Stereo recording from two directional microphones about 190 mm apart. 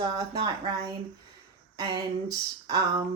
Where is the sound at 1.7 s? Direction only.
20° right (ahead or behind).